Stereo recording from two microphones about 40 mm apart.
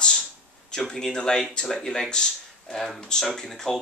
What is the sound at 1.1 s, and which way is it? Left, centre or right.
Speech, centre.